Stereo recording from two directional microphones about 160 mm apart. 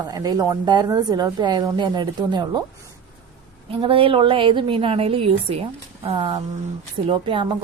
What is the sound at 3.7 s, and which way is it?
A woman's voice, 35° right (ahead or behind).